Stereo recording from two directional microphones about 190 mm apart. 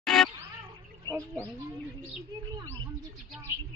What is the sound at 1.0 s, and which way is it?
Speech, 15° right (ahead or behind).